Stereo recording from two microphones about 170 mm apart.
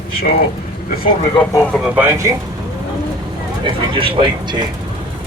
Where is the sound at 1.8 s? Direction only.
10° right (ahead or behind).